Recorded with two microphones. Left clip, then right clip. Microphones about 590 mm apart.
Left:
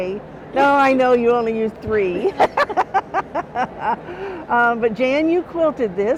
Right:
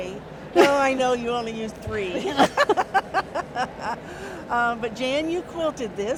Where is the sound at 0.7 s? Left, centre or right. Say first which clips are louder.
Left 7 dB; left.